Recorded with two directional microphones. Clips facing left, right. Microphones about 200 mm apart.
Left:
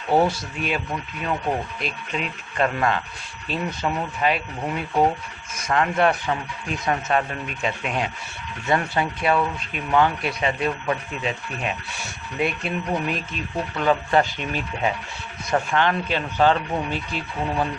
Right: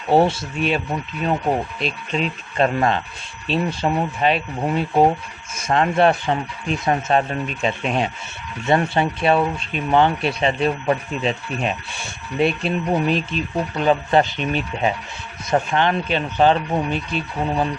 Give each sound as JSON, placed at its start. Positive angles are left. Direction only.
{"t": 0.1, "sound": "speech", "side_deg": -25}